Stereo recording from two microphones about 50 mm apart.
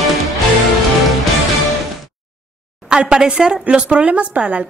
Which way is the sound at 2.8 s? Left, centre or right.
Centre.